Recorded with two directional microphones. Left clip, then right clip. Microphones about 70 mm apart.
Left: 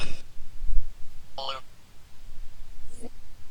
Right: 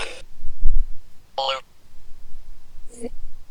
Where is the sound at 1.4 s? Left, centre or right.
Right.